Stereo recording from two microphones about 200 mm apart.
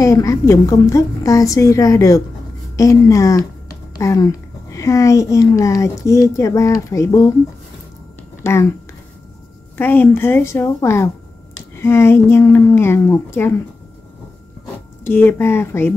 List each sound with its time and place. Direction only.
0.0 s a woman's voice: 15° left (ahead or behind)
8.4 s a woman's voice: 15° left (ahead or behind)
9.8 s a woman's voice: 10° left (ahead or behind)
15.0 s a woman's voice: 10° left (ahead or behind)